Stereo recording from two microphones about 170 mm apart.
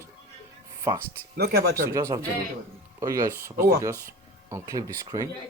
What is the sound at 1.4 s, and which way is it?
Speech, 65° right (ahead or behind).